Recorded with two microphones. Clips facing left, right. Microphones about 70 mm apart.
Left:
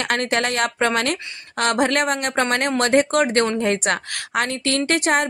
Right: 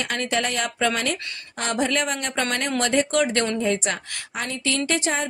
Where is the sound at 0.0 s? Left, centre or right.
Left.